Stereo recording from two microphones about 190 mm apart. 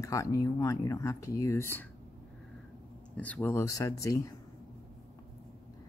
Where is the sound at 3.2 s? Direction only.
5° left (ahead or behind).